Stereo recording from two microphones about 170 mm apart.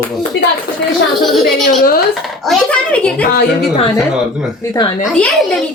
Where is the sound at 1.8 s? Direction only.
60° left (ahead or behind).